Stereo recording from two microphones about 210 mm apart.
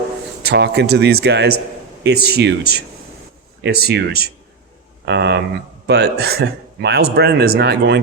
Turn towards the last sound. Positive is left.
turn(degrees=-50)  # may be behind; listen again after turning